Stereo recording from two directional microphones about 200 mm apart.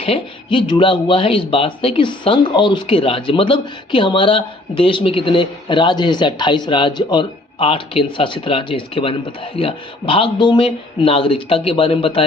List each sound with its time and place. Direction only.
0.0 s speech: 25° left (ahead or behind)